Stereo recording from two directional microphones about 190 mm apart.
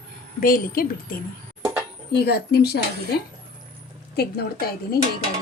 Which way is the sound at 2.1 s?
60° left (ahead or behind).